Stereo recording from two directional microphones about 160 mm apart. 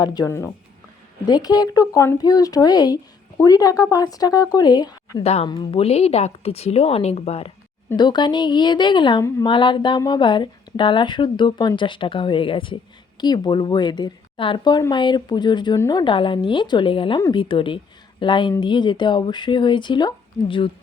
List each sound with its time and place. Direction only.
0.0 s a woman's voice: 25° left (ahead or behind)
5.2 s a woman's voice: 40° left (ahead or behind)
7.9 s a woman's voice: 25° left (ahead or behind)